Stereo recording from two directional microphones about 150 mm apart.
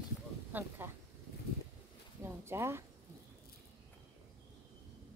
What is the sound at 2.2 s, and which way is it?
Speech, 15° right (ahead or behind).